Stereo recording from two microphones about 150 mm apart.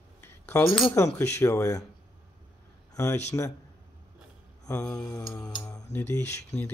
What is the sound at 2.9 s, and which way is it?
Speech, 20° left (ahead or behind).